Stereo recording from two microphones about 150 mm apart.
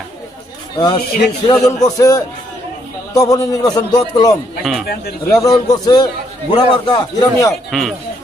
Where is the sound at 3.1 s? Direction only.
25° left (ahead or behind).